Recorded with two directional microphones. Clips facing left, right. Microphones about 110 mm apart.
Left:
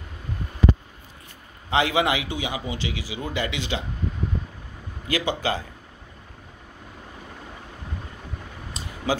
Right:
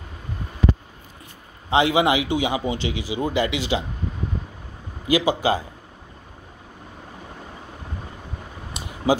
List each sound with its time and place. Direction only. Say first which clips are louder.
1.7 s a man's voice: right 4 dB; 20° right (ahead or behind)
5.0 s speech: right 6 dB; 15° right (ahead or behind)
8.7 s a sound: right 5 dB; 15° right (ahead or behind)